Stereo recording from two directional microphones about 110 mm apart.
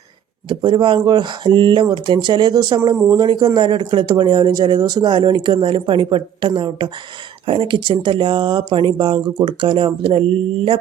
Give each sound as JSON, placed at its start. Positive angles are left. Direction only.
{"t": 0.4, "sound": "speech", "side_deg": -45}